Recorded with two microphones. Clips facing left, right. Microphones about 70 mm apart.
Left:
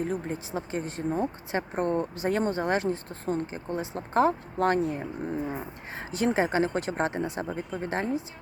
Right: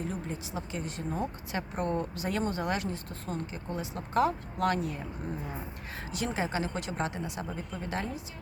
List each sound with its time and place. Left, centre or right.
0.0 s speech: left